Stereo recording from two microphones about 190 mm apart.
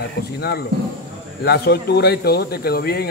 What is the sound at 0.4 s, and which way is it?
Speech, 55° left (ahead or behind).